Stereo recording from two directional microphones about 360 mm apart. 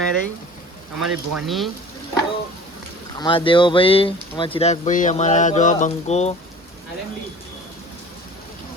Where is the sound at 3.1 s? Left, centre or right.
Centre.